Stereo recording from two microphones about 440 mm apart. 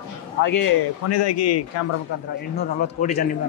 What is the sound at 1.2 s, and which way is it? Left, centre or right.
Speech, left.